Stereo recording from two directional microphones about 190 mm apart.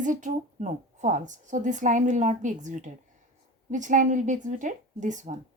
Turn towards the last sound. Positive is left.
turn(degrees=-40)  # may be behind; listen again after turning